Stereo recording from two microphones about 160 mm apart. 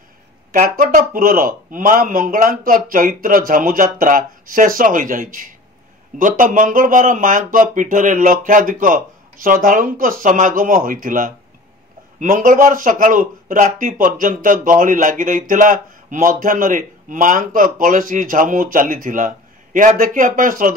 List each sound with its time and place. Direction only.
0.5 s a man's voice: 60° right (ahead or behind)